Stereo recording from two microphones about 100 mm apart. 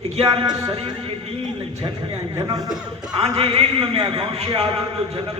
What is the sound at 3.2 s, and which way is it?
A man's voice, 70° right (ahead or behind).